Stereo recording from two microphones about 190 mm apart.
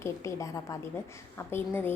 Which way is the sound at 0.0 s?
15° left (ahead or behind).